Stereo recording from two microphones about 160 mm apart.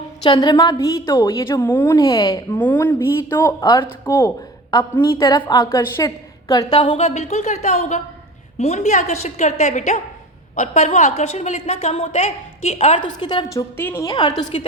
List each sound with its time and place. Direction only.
0.2 s a woman's voice: 25° left (ahead or behind)
2.6 s a woman's voice: 10° left (ahead or behind)
6.7 s a woman's voice: 40° left (ahead or behind)
13.0 s a woman's voice: 30° left (ahead or behind)